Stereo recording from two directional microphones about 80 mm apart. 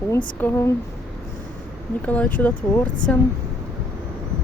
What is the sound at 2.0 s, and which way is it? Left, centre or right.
Speech, centre.